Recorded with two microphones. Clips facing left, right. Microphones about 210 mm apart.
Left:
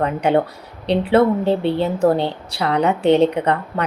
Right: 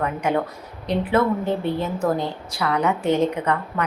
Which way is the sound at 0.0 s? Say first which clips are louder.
Left 5 dB; 30° left (ahead or behind).